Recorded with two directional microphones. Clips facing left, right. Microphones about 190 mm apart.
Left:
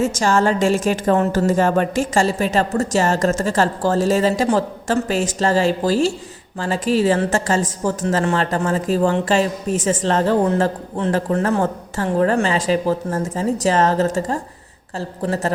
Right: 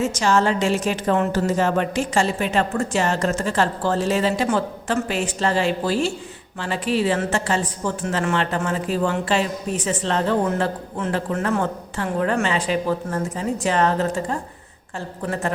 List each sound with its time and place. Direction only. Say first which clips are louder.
0.0 s a woman's voice: left 2 dB; 45° left (ahead or behind)